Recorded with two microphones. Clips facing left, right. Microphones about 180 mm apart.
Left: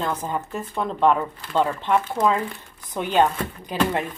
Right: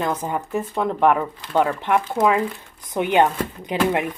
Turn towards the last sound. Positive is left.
turn(degrees=-15)  # may be behind; listen again after turning